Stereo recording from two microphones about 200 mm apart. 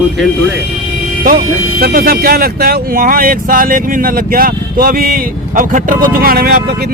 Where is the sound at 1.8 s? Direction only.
50° right (ahead or behind).